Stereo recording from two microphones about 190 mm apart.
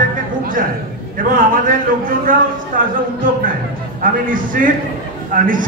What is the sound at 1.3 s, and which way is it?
A man's voice, 45° right (ahead or behind).